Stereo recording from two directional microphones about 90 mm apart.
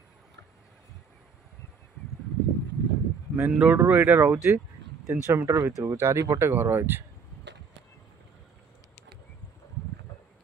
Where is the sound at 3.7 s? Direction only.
20° right (ahead or behind).